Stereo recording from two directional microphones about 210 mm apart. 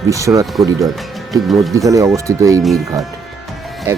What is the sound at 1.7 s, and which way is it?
Speech, 15° right (ahead or behind).